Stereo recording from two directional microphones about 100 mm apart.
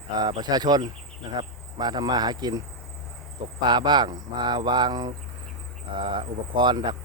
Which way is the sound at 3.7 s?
50° right (ahead or behind).